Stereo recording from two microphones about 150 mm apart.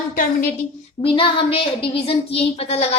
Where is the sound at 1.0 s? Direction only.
35° left (ahead or behind).